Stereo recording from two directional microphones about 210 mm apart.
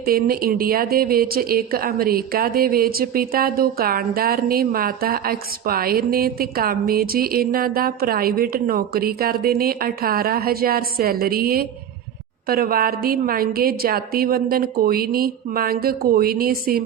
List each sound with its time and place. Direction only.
0.0 s speech: 45° right (ahead or behind)